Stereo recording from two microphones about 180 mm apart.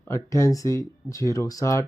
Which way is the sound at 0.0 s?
15° left (ahead or behind).